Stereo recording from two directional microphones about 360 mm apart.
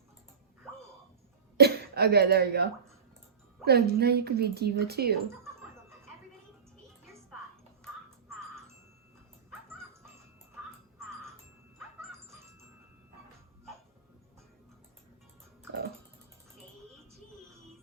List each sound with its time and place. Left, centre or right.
1.5 s speech: right